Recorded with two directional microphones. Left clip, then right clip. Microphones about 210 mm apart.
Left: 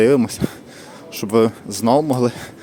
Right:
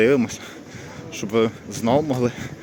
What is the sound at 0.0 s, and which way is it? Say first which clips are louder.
Speech: left 3 dB; 20° left (ahead or behind).